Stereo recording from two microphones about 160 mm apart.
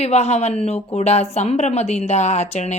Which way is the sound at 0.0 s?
40° left (ahead or behind).